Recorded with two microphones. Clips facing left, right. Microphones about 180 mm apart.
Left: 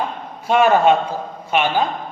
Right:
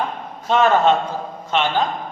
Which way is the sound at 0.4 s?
10° left (ahead or behind).